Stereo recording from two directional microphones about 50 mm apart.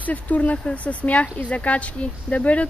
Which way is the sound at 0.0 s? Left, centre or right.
Left.